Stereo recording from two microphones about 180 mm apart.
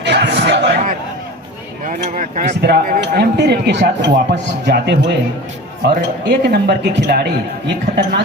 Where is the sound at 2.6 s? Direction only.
60° right (ahead or behind).